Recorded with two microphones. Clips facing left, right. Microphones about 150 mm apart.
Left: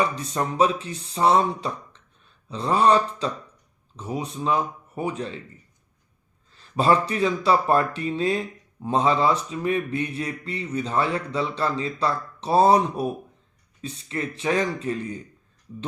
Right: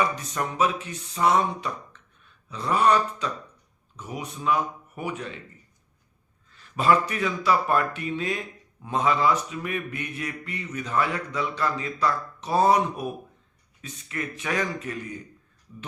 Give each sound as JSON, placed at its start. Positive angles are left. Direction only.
{"t": 0.0, "sound": "speech", "side_deg": 30}
{"t": 6.5, "sound": "speech", "side_deg": 30}